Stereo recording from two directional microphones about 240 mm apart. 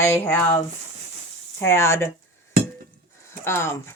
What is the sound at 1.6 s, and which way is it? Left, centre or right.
Speech, centre.